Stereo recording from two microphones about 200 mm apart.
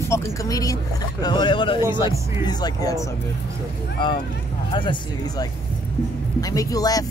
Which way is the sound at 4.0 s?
25° left (ahead or behind).